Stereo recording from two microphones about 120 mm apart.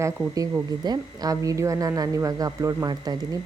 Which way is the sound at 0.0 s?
25° right (ahead or behind).